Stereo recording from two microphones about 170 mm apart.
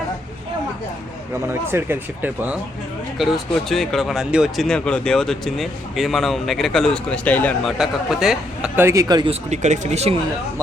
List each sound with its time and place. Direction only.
1.5 s a man's voice: 15° right (ahead or behind)
3.2 s speech: centre (ahead or behind)
7.8 s a man's voice: centre (ahead or behind); by 9.3 s 25° right (ahead or behind)
9.3 s speech: 45° right (ahead or behind)